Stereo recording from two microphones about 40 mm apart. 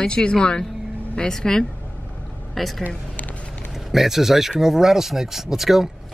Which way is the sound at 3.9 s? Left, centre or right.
Centre.